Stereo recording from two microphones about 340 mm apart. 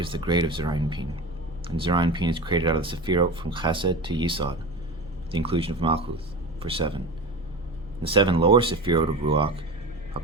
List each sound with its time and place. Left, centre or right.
0.0 s speech: centre
8.0 s speech: centre